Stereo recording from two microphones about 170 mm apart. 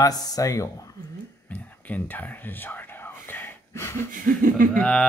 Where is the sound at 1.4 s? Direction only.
10° left (ahead or behind).